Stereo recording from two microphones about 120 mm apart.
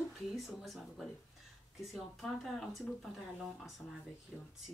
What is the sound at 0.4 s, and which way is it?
Speech, centre (ahead or behind).